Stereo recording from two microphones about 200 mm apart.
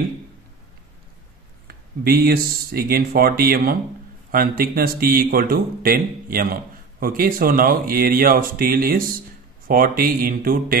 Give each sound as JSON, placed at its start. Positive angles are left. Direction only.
{"t": 1.7, "sound": "speech", "side_deg": -50}